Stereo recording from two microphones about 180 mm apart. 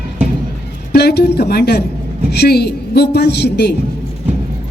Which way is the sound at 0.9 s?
60° left (ahead or behind).